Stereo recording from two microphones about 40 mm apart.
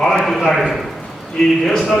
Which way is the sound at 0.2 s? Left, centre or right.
Centre.